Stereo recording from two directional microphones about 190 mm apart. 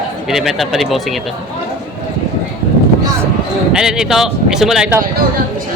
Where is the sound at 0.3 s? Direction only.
Centre (ahead or behind).